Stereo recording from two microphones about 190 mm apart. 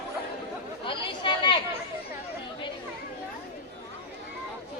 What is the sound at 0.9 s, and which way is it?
Chatter, 25° left (ahead or behind).